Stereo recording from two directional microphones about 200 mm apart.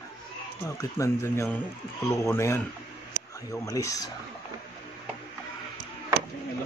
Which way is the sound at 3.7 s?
15° left (ahead or behind).